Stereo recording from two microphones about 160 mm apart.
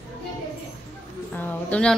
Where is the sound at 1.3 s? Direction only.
10° left (ahead or behind).